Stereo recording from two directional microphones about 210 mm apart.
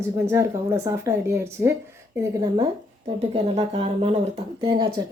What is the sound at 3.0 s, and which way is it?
Speech, 30° right (ahead or behind).